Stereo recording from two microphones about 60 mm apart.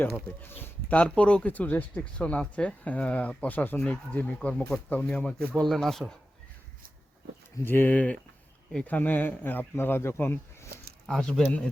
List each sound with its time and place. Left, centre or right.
0.4 s speech: left
0.9 s speech: left
5.6 s speech: centre
7.6 s speech: left
11.0 s speech: centre